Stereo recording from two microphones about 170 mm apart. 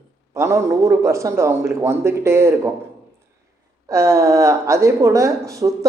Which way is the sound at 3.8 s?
20° right (ahead or behind).